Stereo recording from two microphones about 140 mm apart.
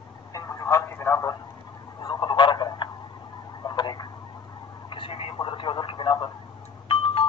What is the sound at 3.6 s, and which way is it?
Tick-tock, 30° left (ahead or behind).